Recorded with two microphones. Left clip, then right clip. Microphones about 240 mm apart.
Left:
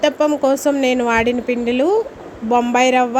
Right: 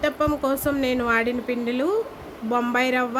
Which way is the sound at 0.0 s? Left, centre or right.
Centre.